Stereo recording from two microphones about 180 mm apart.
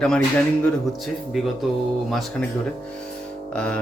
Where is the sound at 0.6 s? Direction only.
Centre (ahead or behind).